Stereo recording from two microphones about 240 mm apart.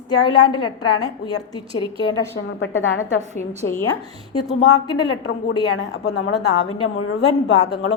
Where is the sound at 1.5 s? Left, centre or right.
Centre.